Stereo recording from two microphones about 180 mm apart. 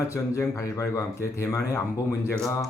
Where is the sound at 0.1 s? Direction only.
15° left (ahead or behind).